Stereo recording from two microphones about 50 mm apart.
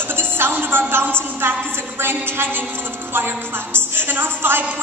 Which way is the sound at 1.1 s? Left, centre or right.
Right.